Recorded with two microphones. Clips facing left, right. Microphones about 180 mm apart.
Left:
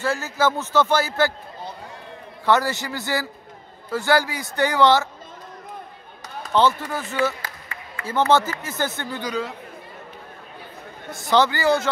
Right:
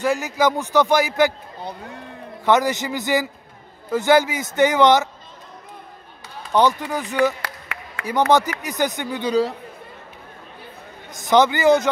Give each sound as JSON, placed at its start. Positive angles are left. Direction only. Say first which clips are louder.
{"t": 0.0, "sound": "a man's voice", "louder": "right 3 dB", "side_deg": -15}
{"t": 2.4, "sound": "a man's voice", "louder": "right 2 dB", "side_deg": -20}
{"t": 6.5, "sound": "a man's voice", "louder": "right 2 dB", "side_deg": -15}
{"t": 7.4, "sound": "a sound", "louder": "right 3 dB", "side_deg": -75}
{"t": 8.0, "sound": "a man's voice", "louder": "right 2 dB", "side_deg": -15}
{"t": 9.2, "sound": "speech", "louder": "right 9 dB", "side_deg": -35}
{"t": 11.1, "sound": "a man's voice", "louder": "right 3 dB", "side_deg": -20}